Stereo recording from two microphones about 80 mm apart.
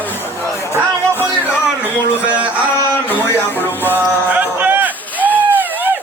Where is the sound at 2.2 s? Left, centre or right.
Centre.